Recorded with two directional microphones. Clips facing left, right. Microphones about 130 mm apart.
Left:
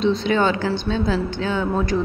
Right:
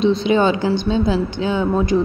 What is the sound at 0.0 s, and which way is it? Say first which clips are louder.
A woman's voice: right 3 dB; 15° right (ahead or behind).